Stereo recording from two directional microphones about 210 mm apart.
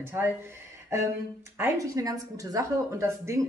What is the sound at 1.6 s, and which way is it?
A woman's voice, 15° right (ahead or behind).